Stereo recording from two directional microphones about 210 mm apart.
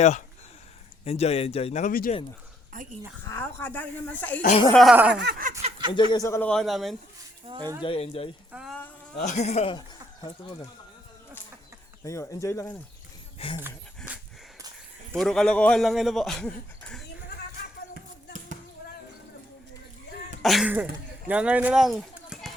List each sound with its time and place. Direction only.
1.0 s speech: 30° left (ahead or behind)
2.7 s speech: 40° right (ahead or behind)
3.2 s speech: 10° left (ahead or behind); by 5.2 s 5° right (ahead or behind)
5.2 s a sound: 45° right (ahead or behind)
5.9 s speech: 20° left (ahead or behind); by 6.9 s centre (ahead or behind)
7.4 s speech: 20° right (ahead or behind)
7.8 s speech: 25° left (ahead or behind)
8.5 s a sound: centre (ahead or behind)
9.1 s speech: 35° left (ahead or behind)
12.0 s speech: 15° left (ahead or behind)
13.7 s dog: 5° right (ahead or behind)
15.1 s a man's voice: centre (ahead or behind)
20.4 s speech: centre (ahead or behind)